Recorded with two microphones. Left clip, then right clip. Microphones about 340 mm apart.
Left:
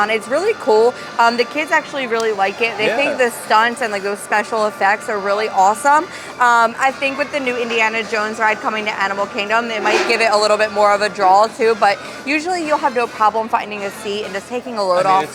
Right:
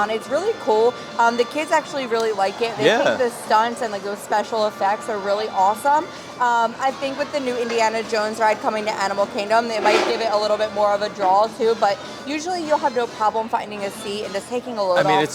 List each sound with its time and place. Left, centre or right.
0.0 s speech: left
2.8 s speech: right
3.2 s speech: centre
10.1 s speech: left